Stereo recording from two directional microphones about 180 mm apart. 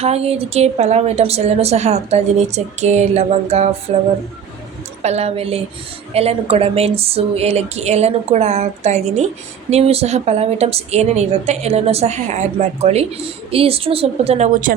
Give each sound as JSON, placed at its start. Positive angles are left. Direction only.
{"t": 0.0, "sound": "a woman's voice", "side_deg": -35}
{"t": 5.0, "sound": "a woman's voice", "side_deg": -35}